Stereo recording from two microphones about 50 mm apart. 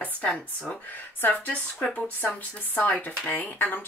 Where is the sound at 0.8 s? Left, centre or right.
Left.